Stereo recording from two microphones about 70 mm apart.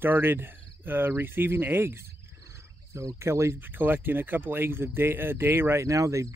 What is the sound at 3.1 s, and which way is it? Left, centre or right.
Speech, right.